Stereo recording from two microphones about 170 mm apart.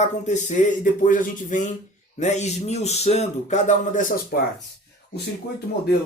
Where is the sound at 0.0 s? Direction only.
45° left (ahead or behind).